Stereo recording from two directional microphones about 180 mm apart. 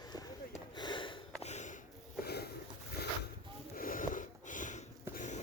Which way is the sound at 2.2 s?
60° left (ahead or behind).